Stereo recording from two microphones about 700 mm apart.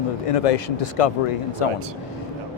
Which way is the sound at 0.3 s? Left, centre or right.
Left.